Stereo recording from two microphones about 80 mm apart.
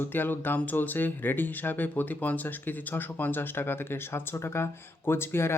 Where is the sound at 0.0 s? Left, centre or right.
Left.